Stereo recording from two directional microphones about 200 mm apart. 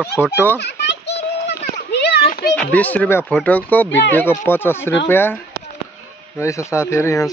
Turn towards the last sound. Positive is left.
turn(degrees=15)  # may be behind; listen again after turning